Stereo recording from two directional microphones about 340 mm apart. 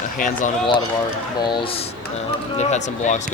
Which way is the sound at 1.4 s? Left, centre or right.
Centre.